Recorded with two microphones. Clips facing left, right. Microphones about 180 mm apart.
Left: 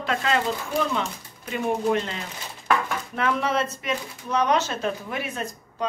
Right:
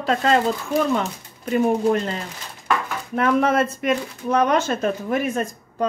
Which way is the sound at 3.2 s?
50° right (ahead or behind).